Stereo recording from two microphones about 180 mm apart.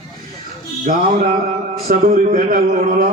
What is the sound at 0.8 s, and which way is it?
Speech, 50° right (ahead or behind).